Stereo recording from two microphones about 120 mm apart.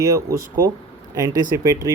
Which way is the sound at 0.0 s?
25° right (ahead or behind).